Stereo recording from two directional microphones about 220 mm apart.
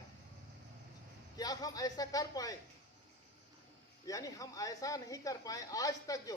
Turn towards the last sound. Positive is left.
turn(degrees=15)  # may be behind; listen again after turning